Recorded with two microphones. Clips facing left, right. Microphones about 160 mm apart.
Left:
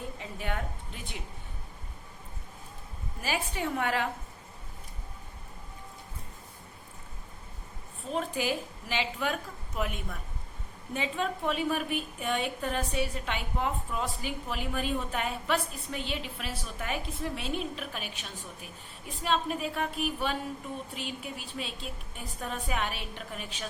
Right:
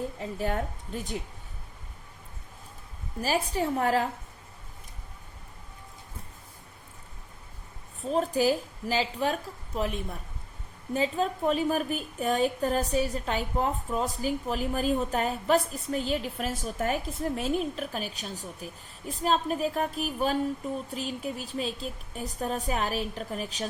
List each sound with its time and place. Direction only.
0.2 s a woman's voice: 35° right (ahead or behind)
3.2 s a woman's voice: 40° right (ahead or behind)
8.0 s a woman's voice: 40° right (ahead or behind)